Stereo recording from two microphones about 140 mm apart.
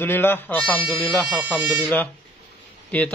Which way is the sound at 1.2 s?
5° right (ahead or behind).